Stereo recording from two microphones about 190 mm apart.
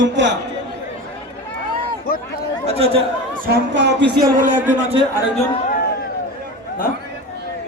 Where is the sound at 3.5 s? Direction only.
65° right (ahead or behind).